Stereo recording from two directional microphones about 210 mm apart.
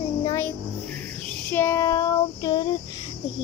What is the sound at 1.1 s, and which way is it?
Child singing, 5° left (ahead or behind).